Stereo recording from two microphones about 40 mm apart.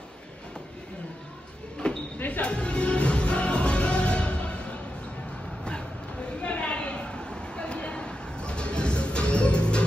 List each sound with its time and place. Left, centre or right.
2.1 s music: left
2.4 s music: left
6.4 s a sound: left